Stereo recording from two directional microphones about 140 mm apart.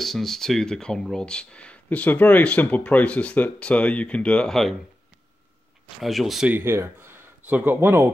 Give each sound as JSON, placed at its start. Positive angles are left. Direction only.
{"t": 0.0, "sound": "speech", "side_deg": 0}
{"t": 5.9, "sound": "speech", "side_deg": 0}
{"t": 6.5, "sound": "speech", "side_deg": -20}